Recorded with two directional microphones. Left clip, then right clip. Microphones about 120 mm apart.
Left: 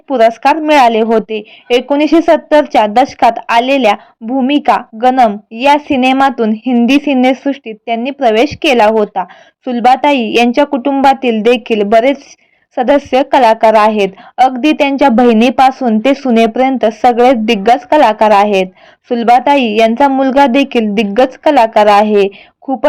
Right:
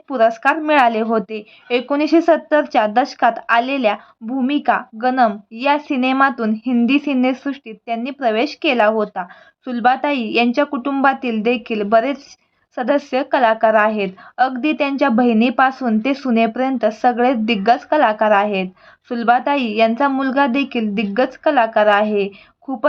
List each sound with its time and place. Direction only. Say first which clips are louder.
0.1 s speech: left 6 dB; 30° left (ahead or behind)